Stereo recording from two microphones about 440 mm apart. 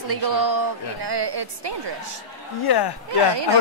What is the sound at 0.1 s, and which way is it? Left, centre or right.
A woman's voice, right.